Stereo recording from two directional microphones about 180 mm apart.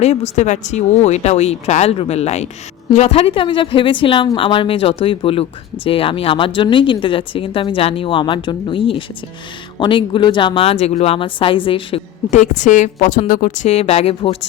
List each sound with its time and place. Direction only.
0.0 s a woman's voice: 35° left (ahead or behind)
12.3 s a woman's voice: 45° left (ahead or behind)